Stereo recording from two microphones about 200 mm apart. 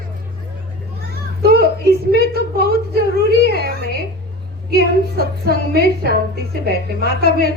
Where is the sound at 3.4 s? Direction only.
50° right (ahead or behind).